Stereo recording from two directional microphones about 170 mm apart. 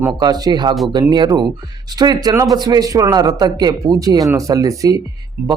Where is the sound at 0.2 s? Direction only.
20° right (ahead or behind).